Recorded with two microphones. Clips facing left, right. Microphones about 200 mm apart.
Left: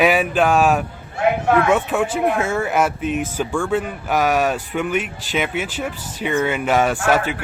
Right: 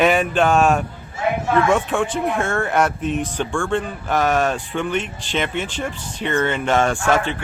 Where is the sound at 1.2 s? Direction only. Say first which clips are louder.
Left 4 dB; 65° left (ahead or behind).